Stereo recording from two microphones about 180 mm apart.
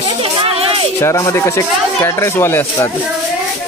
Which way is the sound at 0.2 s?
30° right (ahead or behind).